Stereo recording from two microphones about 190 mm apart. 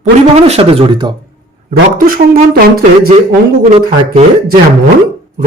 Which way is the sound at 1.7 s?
50° right (ahead or behind).